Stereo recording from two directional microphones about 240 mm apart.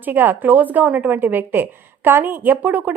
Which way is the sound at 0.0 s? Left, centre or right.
Centre.